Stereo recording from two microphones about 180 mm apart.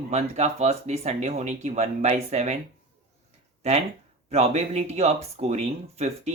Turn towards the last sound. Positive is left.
turn(degrees=-40)  # may be behind; listen again after turning